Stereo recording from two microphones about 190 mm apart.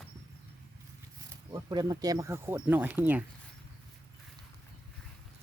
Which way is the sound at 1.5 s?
20° right (ahead or behind).